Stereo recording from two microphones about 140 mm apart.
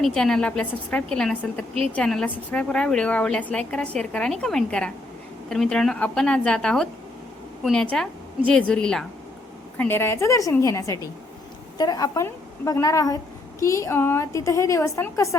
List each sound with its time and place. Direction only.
0.0 s a woman's voice: 5° left (ahead or behind)
9.7 s a woman's voice: 15° left (ahead or behind)